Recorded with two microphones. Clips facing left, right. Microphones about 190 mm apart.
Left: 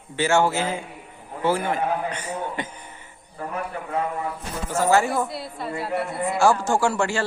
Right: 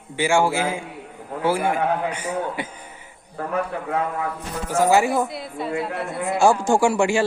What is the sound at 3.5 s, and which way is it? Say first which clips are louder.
Speech: right 5 dB; 70° right (ahead or behind).